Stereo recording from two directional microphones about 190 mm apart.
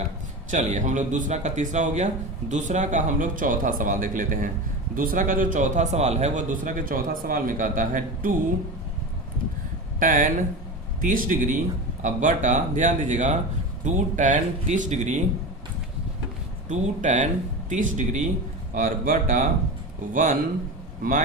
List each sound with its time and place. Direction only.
0.5 s a man's voice: 40° right (ahead or behind)
10.0 s a man's voice: 45° right (ahead or behind)
16.6 s a man's voice: 40° right (ahead or behind)
21.0 s a man's voice: 45° right (ahead or behind)